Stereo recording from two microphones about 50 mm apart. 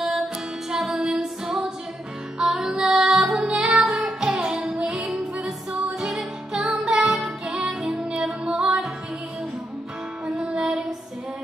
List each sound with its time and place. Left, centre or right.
0.7 s music: centre
4.2 s music: centre
4.7 s music: centre
7.2 s music: centre
7.8 s music: centre
8.1 s music: right
10.2 s music: centre